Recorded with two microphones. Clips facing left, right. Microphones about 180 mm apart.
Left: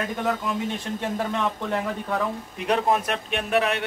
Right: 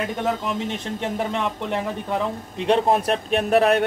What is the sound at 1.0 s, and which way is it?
A man's voice, 20° right (ahead or behind).